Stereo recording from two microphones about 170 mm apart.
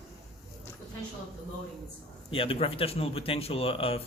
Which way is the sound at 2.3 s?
35° left (ahead or behind).